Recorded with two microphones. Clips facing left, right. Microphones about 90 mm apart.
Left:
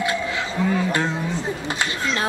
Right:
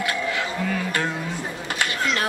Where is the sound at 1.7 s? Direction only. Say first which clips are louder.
Right 4 dB; 25° left (ahead or behind).